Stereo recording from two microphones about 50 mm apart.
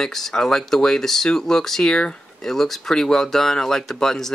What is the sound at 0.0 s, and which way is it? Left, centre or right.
Speech, centre.